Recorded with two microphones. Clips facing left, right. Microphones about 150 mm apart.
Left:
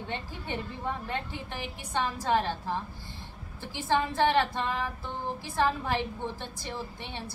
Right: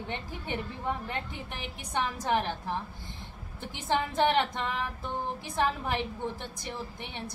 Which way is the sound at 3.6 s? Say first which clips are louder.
Left 2 dB; 20° right (ahead or behind).